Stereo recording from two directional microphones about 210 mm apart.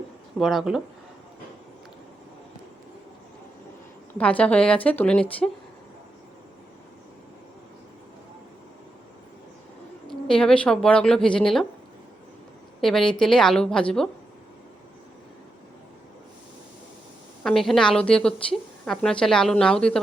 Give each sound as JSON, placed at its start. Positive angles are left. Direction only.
{"t": 0.3, "sound": "a woman's voice", "side_deg": 0}
{"t": 4.2, "sound": "a woman's voice", "side_deg": 5}
{"t": 10.1, "sound": "a woman's voice", "side_deg": 5}
{"t": 12.8, "sound": "a woman's voice", "side_deg": 0}
{"t": 17.4, "sound": "a woman's voice", "side_deg": 0}